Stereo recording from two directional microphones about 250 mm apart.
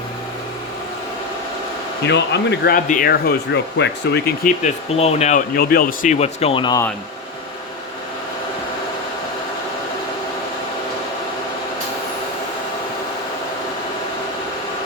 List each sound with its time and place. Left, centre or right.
2.0 s speech: left
4.6 s speech: left